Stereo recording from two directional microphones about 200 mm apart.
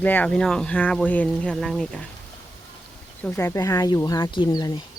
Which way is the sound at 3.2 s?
15° left (ahead or behind).